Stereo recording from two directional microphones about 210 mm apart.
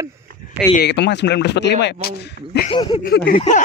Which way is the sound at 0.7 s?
55° left (ahead or behind).